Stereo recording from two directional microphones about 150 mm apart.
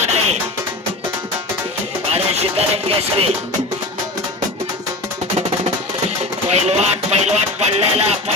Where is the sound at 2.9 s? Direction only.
40° right (ahead or behind).